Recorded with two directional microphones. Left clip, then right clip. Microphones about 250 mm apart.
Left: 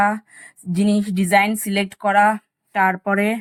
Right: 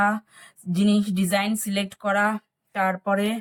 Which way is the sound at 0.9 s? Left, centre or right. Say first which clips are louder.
Left 5 dB; centre.